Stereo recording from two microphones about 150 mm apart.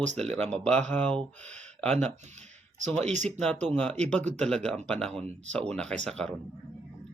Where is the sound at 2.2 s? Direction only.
50° right (ahead or behind).